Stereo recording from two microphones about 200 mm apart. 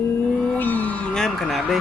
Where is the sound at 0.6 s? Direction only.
10° left (ahead or behind).